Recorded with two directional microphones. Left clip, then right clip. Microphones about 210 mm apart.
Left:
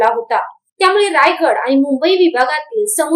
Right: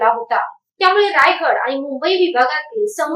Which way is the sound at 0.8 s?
45° left (ahead or behind).